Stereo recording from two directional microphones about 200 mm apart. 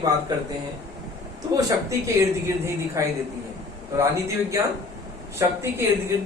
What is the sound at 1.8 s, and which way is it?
Speech, 15° right (ahead or behind).